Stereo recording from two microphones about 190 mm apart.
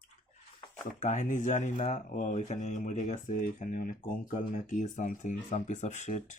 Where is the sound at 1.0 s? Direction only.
40° left (ahead or behind).